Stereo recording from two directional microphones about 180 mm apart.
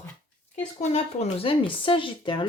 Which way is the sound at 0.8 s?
35° left (ahead or behind).